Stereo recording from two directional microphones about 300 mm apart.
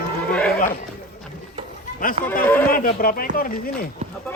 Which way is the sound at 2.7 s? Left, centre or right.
Left.